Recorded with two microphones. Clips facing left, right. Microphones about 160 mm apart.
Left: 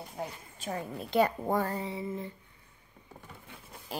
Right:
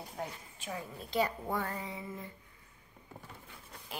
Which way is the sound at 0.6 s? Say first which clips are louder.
Left 5 dB; 45° left (ahead or behind).